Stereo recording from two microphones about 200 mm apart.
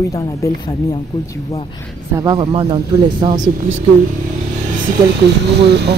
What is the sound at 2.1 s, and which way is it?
Speech, 25° right (ahead or behind).